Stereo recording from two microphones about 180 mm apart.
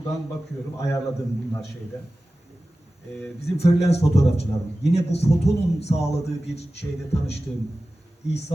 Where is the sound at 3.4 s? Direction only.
35° left (ahead or behind).